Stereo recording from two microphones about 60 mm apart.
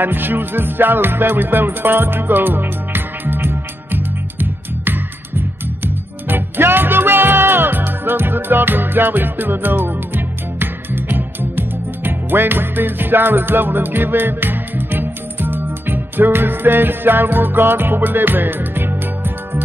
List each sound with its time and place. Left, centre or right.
0.0 s music: right